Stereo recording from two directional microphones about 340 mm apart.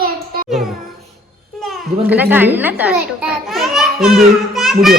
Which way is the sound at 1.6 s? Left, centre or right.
Centre.